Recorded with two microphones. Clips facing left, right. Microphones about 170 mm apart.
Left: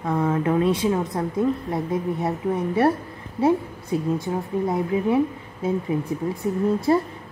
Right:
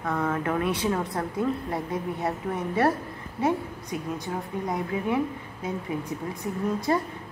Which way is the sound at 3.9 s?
30° left (ahead or behind).